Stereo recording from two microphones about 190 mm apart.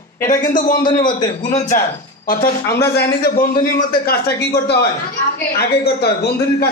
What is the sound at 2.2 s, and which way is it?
A man's voice, 50° left (ahead or behind).